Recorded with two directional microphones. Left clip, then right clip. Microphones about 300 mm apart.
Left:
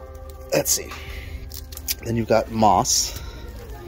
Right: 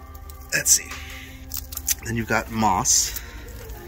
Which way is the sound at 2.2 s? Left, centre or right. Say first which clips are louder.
Left 5 dB; right.